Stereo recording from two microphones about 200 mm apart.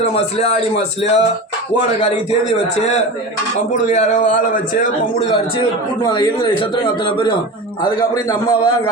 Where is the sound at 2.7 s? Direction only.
30° left (ahead or behind).